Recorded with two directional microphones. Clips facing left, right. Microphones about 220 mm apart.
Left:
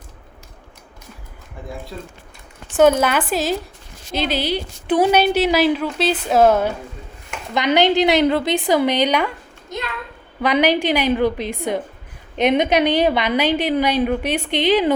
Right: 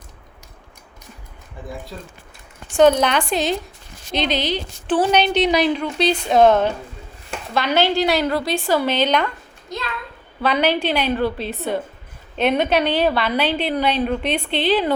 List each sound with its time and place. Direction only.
1.9 s a woman's voice: centre (ahead or behind); by 14.9 s 15° left (ahead or behind)